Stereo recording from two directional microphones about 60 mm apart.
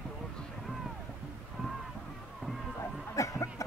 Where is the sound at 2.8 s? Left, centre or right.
Left.